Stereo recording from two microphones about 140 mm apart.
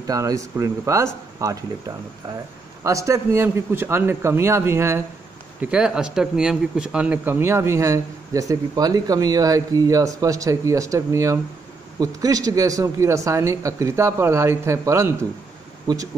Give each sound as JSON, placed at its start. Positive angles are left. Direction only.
{"t": 0.0, "sound": "a man's voice", "side_deg": -25}
{"t": 5.6, "sound": "a man's voice", "side_deg": -5}